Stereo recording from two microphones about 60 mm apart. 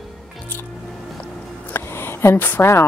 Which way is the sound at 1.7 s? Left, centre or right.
Left.